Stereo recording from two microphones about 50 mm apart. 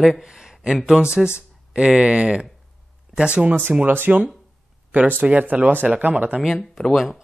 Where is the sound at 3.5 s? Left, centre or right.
Right.